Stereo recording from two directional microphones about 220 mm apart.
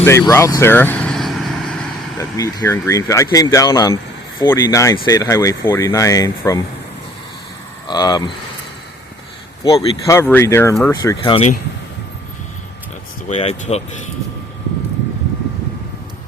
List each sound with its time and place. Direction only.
0.0 s vehicle: 10° left (ahead or behind)
2.1 s speech: 15° left (ahead or behind)
7.9 s speech: 20° left (ahead or behind)
9.6 s speech: 25° left (ahead or behind)
10.2 s speech: 10° left (ahead or behind)
13.2 s speech: 30° left (ahead or behind)